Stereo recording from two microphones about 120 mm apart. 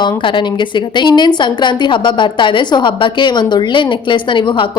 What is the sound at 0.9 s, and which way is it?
Speech, 40° left (ahead or behind).